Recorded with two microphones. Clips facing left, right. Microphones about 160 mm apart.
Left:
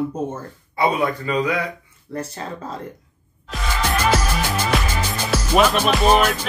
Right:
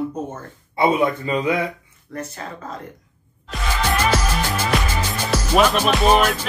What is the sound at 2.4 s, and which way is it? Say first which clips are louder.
Speech: left 3 dB; 30° left (ahead or behind).